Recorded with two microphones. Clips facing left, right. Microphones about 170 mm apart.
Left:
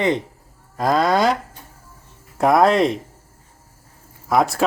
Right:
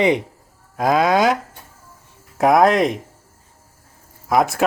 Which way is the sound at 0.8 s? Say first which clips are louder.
Right 1 dB; 5° right (ahead or behind).